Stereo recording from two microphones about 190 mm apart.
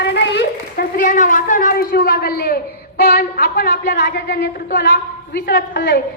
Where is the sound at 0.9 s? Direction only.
45° left (ahead or behind).